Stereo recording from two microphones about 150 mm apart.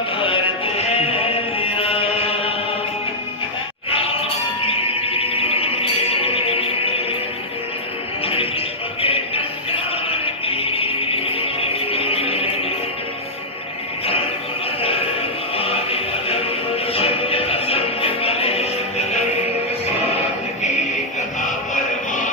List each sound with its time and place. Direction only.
0.2 s music: 40° left (ahead or behind)
4.6 s music: 40° left (ahead or behind)
8.3 s music: 40° left (ahead or behind)
15.5 s music: 40° left (ahead or behind)